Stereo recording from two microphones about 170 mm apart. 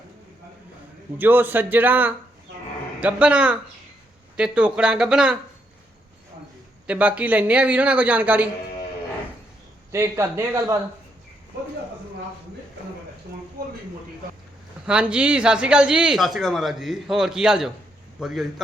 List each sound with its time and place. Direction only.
1.2 s speech: 10° right (ahead or behind)
6.8 s speech: 5° right (ahead or behind)
9.9 s speech: 15° right (ahead or behind)
14.8 s speech: 5° right (ahead or behind)